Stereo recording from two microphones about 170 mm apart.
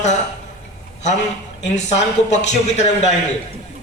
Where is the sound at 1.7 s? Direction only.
45° left (ahead or behind).